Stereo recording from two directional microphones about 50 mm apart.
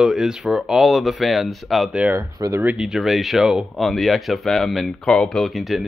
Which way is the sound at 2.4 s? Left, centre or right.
Right.